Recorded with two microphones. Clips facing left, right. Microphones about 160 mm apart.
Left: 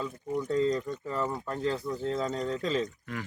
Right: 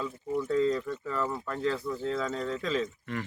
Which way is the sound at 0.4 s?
40° left (ahead or behind).